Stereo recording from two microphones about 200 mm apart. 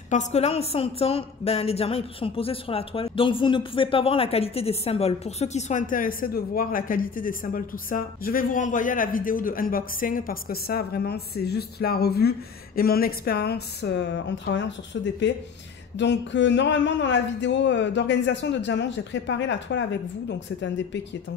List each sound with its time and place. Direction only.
0.1 s a woman's voice: 35° left (ahead or behind); by 21.0 s 65° left (ahead or behind)